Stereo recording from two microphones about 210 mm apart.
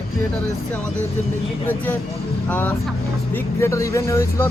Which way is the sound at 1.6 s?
10° left (ahead or behind).